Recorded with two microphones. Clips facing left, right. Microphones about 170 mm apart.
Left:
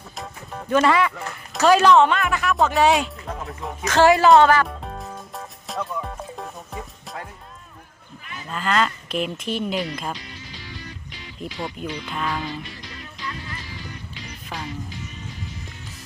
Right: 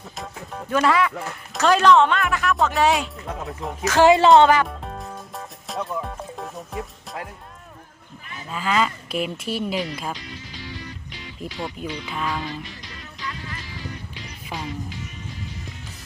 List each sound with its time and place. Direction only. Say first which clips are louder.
0.2 s speech: even; centre (ahead or behind)
4.0 s speech: right 1 dB; 20° right (ahead or behind)
4.6 s music: even; centre (ahead or behind)
8.4 s speech: even; 5° right (ahead or behind)
11.3 s speech: even; centre (ahead or behind)